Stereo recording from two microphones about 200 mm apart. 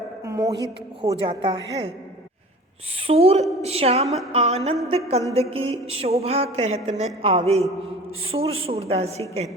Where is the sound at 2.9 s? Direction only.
30° right (ahead or behind).